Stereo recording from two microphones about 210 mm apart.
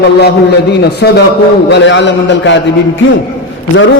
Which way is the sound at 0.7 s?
50° left (ahead or behind).